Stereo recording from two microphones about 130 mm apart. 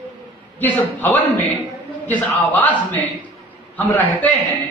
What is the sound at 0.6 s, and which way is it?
Speech, 15° left (ahead or behind).